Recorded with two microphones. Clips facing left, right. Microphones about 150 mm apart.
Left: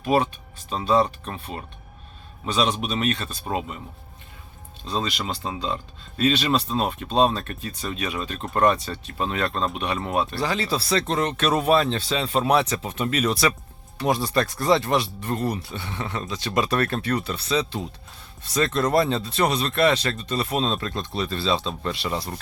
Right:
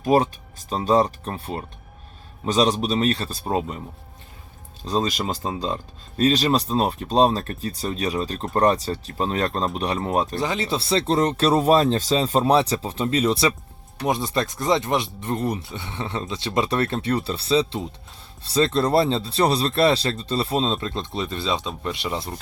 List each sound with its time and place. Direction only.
0.0 s speech: 40° right (ahead or behind)
4.9 s speech: 40° right (ahead or behind)
10.3 s speech: 20° right (ahead or behind)